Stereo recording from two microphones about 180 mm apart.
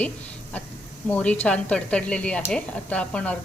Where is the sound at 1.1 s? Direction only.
5° left (ahead or behind).